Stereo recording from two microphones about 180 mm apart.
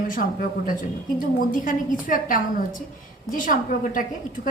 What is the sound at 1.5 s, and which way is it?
A woman's voice, 50° left (ahead or behind).